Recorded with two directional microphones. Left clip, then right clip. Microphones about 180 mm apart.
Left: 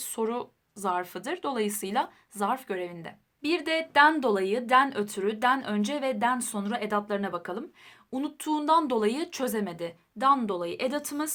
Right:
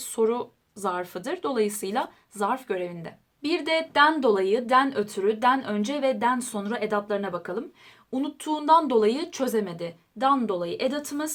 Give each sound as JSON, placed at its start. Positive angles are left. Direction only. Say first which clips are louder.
{"t": 0.0, "sound": "speech", "louder": "right 6 dB", "side_deg": 30}